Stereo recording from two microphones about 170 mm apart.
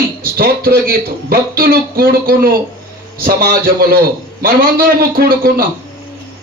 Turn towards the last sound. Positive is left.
turn(degrees=-60)  # may be behind; listen again after turning